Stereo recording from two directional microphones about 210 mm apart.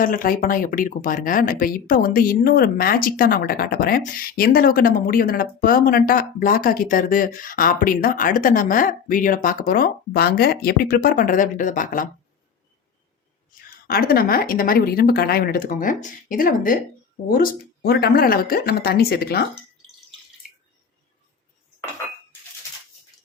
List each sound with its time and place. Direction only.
0.0 s speech: 40° left (ahead or behind)
13.8 s speech: 45° left (ahead or behind)